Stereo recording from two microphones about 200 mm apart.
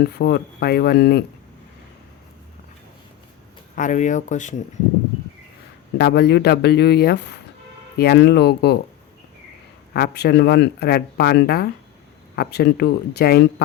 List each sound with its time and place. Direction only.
0.0 s speech: 55° left (ahead or behind)
3.8 s speech: 40° left (ahead or behind)
6.0 s speech: 55° left (ahead or behind)
9.9 s speech: 50° left (ahead or behind)